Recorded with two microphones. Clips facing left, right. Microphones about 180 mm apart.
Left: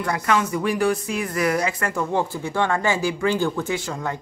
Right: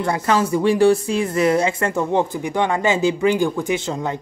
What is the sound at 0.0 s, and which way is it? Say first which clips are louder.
Speech: right 3 dB; 25° right (ahead or behind).